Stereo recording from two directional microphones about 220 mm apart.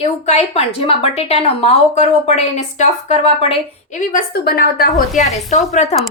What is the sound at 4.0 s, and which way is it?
Speech, 40° left (ahead or behind).